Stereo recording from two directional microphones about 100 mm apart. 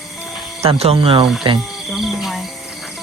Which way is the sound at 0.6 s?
80° right.